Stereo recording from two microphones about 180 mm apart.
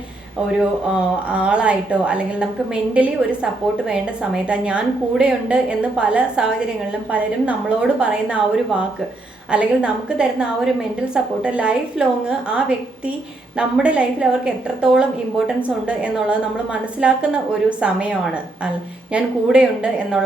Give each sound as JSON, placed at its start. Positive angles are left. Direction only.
{"t": 1.3, "sound": "a woman's voice", "side_deg": -5}
{"t": 19.1, "sound": "a woman's voice", "side_deg": -5}